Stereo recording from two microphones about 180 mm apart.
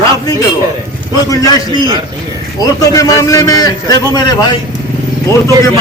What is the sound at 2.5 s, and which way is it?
A man's voice, 20° left (ahead or behind).